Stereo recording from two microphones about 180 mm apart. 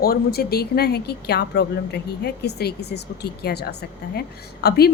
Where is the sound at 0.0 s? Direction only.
60° left (ahead or behind).